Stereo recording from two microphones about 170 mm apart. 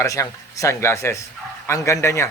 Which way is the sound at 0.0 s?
20° left (ahead or behind).